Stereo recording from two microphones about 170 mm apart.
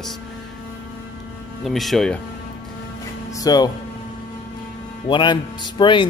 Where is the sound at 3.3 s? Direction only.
20° left (ahead or behind).